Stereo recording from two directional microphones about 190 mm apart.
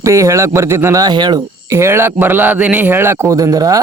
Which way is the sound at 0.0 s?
15° right (ahead or behind).